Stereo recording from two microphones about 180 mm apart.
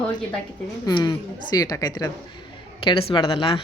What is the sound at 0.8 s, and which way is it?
A man's voice, 20° left (ahead or behind).